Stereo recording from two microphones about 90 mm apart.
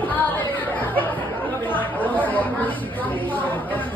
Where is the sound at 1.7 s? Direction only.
20° left (ahead or behind).